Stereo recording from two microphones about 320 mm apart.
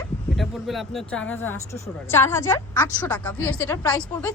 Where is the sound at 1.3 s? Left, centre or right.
Centre.